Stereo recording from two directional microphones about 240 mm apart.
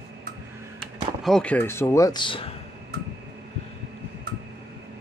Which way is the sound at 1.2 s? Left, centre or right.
Centre.